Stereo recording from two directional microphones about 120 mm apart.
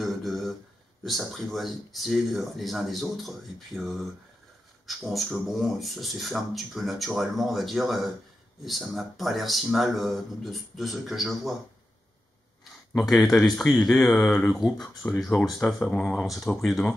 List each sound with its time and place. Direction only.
0.0 s a sound: centre (ahead or behind)
1.0 s speech: centre (ahead or behind)
12.9 s speech: centre (ahead or behind)
15.6 s speech: 15° left (ahead or behind)
16.2 s speech: 5° left (ahead or behind)